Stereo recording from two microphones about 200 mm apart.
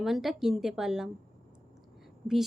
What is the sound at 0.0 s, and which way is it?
A woman's voice, centre (ahead or behind).